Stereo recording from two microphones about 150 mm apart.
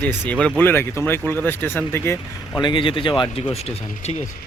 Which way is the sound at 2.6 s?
35° left (ahead or behind).